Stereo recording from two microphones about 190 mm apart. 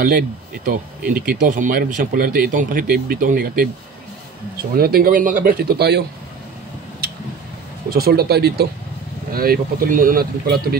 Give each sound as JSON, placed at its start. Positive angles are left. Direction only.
{"t": 0.7, "sound": "speech", "side_deg": -50}
{"t": 4.7, "sound": "speech", "side_deg": -50}
{"t": 7.0, "sound": "tick-tock", "side_deg": -55}
{"t": 7.9, "sound": "speech", "side_deg": -55}